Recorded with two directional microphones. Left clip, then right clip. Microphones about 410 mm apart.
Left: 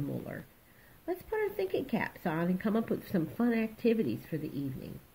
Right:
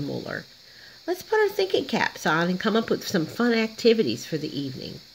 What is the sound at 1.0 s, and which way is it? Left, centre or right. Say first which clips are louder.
Speech: right 11 dB; right.